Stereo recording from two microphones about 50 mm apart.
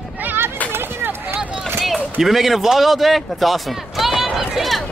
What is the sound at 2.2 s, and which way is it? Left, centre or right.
A man's voice, centre.